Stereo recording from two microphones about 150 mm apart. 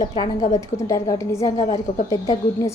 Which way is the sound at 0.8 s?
20° left (ahead or behind).